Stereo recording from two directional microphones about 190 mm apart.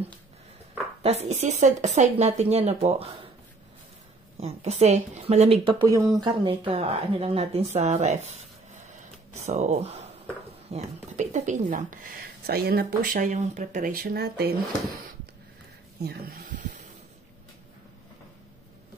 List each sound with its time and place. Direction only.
1.0 s speech: 35° right (ahead or behind)
4.4 s speech: 35° right (ahead or behind)
5.9 s a woman's voice: 15° right (ahead or behind); by 14.5 s 55° right (ahead or behind)
16.0 s a woman's voice: 50° right (ahead or behind)